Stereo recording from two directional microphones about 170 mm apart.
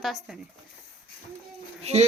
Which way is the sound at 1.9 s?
40° right (ahead or behind).